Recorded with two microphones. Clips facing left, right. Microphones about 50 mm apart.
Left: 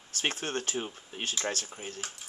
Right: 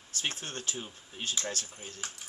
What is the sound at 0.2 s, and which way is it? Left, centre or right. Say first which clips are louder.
Speech: left 5 dB; left.